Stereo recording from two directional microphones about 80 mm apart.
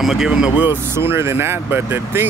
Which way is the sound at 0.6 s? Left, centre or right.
Right.